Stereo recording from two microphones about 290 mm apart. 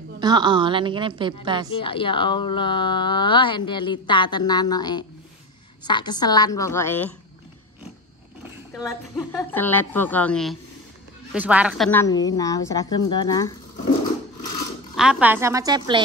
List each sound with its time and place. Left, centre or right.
0.2 s a woman's voice: centre
1.7 s a woman's voice: centre
9.1 s a woman's voice: centre
11.9 s a woman's voice: centre
15.0 s a woman's voice: centre